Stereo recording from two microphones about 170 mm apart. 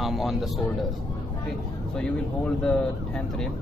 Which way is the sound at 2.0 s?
5° left (ahead or behind).